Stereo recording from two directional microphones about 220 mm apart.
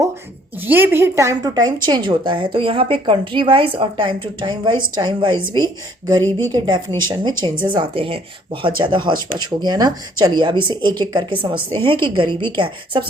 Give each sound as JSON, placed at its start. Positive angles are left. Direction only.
{"t": 0.6, "sound": "speech", "side_deg": -10}